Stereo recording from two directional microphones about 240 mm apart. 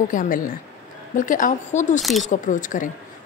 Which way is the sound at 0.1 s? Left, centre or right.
Left.